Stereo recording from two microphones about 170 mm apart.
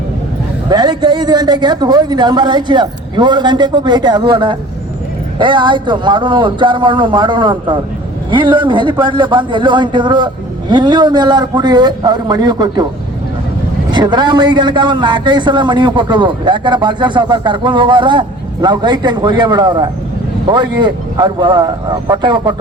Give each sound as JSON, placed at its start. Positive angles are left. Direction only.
{"t": 0.7, "sound": "speech", "side_deg": -25}
{"t": 13.9, "sound": "speech", "side_deg": -25}